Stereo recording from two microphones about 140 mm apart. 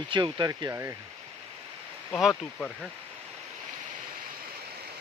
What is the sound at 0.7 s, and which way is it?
Speech, 20° right (ahead or behind).